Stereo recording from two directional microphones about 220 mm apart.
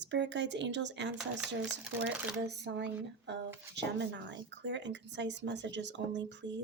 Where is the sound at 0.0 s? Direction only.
55° right (ahead or behind).